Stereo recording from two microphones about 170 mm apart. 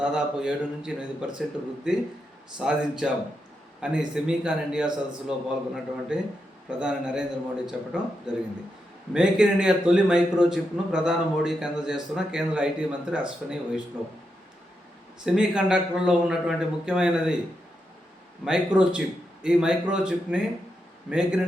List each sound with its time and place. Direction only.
0.0 s a man's voice: 5° right (ahead or behind)
6.1 s a man's voice: 5° right (ahead or behind)
15.2 s a man's voice: 5° right (ahead or behind)
18.4 s a man's voice: 5° right (ahead or behind)